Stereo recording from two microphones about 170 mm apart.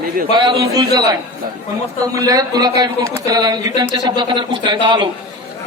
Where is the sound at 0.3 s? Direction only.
25° right (ahead or behind).